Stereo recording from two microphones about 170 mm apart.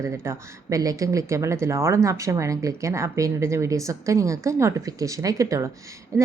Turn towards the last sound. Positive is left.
turn(degrees=-20)  # may be behind; listen again after turning